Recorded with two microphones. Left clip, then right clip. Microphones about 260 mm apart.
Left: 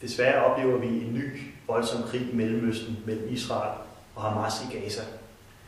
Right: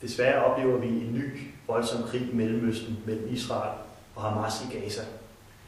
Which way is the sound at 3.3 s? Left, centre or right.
Centre.